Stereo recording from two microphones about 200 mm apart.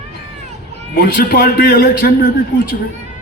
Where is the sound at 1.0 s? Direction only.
45° left (ahead or behind).